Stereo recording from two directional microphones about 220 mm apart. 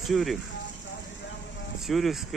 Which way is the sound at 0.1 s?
Centre (ahead or behind).